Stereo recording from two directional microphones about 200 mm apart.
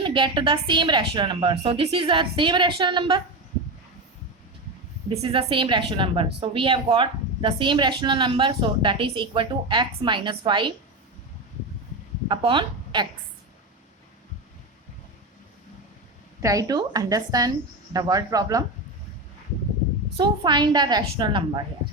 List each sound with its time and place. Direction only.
0.0 s a woman's voice: 25° right (ahead or behind)
5.0 s a woman's voice: 25° right (ahead or behind)
12.3 s a woman's voice: 25° right (ahead or behind)
16.4 s a woman's voice: 15° right (ahead or behind)
20.1 s a woman's voice: 20° right (ahead or behind)